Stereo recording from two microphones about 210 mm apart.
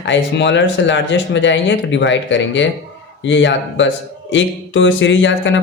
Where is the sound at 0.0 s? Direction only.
55° left (ahead or behind).